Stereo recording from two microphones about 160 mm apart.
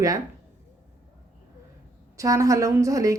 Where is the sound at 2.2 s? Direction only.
20° right (ahead or behind).